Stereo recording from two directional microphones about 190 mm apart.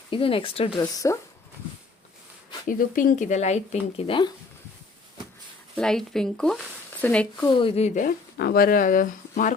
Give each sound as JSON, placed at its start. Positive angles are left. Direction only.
{"t": 0.1, "sound": "speech", "side_deg": 30}
{"t": 0.9, "sound": "speech", "side_deg": 15}
{"t": 2.6, "sound": "speech", "side_deg": 45}
{"t": 5.7, "sound": "speech", "side_deg": 5}
{"t": 7.4, "sound": "speech", "side_deg": 25}
{"t": 8.4, "sound": "speech", "side_deg": 55}